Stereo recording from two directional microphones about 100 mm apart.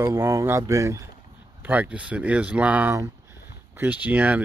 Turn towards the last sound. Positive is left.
turn(degrees=-15)  # may be behind; listen again after turning